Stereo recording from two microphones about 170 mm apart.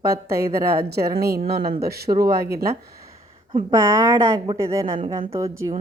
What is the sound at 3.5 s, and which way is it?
Speech, 30° right (ahead or behind).